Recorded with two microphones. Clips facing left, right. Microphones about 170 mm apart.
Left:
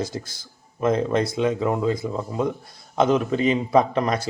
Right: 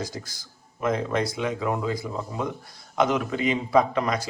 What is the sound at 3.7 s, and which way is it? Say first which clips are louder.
Speech: right 1 dB; 30° left (ahead or behind).